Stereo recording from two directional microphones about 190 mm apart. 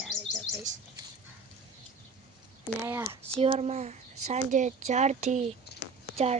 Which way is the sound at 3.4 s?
35° right (ahead or behind).